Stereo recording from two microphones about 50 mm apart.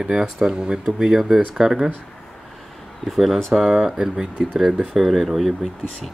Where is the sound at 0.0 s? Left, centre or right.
Centre.